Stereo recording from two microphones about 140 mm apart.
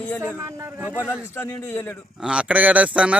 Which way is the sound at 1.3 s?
20° left (ahead or behind).